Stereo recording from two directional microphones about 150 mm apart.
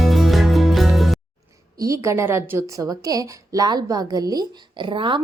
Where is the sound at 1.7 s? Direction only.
20° right (ahead or behind).